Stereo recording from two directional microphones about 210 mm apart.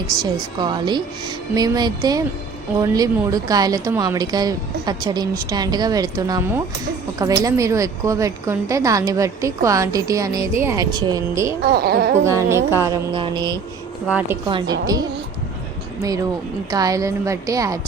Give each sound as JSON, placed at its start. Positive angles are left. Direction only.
{"t": 0.6, "sound": "music", "side_deg": -20}
{"t": 2.7, "sound": "a woman's voice", "side_deg": -15}
{"t": 7.4, "sound": "a woman's voice", "side_deg": -15}
{"t": 11.6, "sound": "a woman's voice", "side_deg": -50}
{"t": 12.2, "sound": "a woman's voice", "side_deg": -15}
{"t": 13.1, "sound": "music", "side_deg": -25}
{"t": 14.1, "sound": "a woman's voice", "side_deg": -10}
{"t": 14.4, "sound": "music", "side_deg": -20}
{"t": 16.0, "sound": "a woman's voice", "side_deg": -15}